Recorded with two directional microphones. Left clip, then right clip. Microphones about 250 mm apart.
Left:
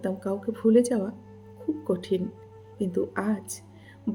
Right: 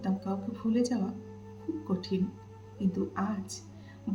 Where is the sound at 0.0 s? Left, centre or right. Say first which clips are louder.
Left 6 dB; left.